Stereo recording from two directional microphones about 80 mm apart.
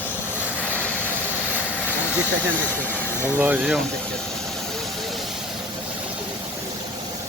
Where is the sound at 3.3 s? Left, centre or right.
Right.